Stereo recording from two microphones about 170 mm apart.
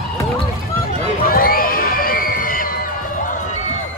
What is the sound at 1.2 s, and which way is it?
Music, 60° left (ahead or behind).